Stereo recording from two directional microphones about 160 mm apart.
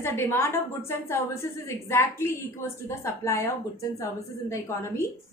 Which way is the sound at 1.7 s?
15° left (ahead or behind).